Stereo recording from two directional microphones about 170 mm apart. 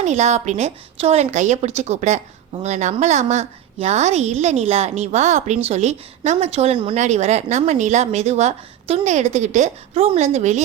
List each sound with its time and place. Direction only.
0.0 s a woman's voice: 45° right (ahead or behind)